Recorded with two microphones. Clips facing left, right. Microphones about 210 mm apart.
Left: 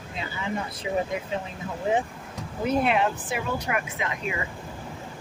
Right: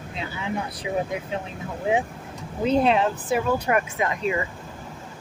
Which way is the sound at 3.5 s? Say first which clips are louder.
Right 6 dB; 50° right (ahead or behind).